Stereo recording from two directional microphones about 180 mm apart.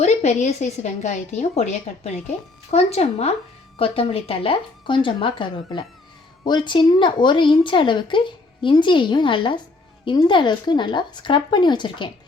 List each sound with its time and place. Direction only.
0.0 s a woman's voice: 40° left (ahead or behind)